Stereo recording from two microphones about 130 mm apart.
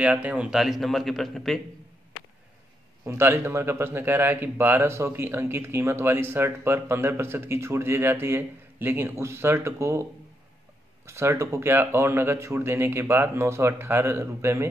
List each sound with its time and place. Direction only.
0.0 s a man's voice: 10° right (ahead or behind)
3.1 s speech: 20° right (ahead or behind)
11.1 s speech: 20° right (ahead or behind)